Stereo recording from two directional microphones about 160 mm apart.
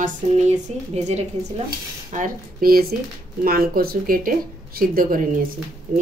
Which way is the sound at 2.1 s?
55° right (ahead or behind).